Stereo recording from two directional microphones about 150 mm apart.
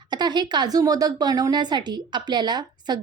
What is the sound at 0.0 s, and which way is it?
A woman's voice, 30° right (ahead or behind).